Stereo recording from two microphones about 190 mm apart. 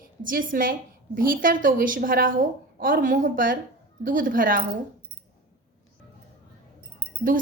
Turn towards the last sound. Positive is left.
turn(degrees=-45)  # may be behind; listen again after turning